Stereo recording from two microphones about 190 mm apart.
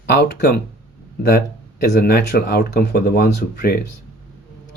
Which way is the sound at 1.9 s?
60° left (ahead or behind).